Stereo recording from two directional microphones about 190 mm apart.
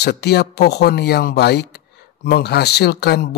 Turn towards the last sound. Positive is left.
turn(degrees=60)  # may be behind; listen again after turning